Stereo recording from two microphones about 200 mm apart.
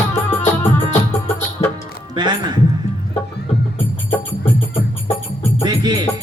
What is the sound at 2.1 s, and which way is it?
Music, 20° right (ahead or behind).